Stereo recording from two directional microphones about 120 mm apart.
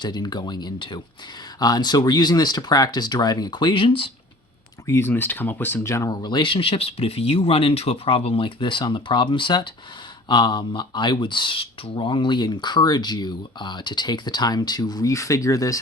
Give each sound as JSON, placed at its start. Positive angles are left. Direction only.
{"t": 0.0, "sound": "speech", "side_deg": 35}
{"t": 4.9, "sound": "speech", "side_deg": 20}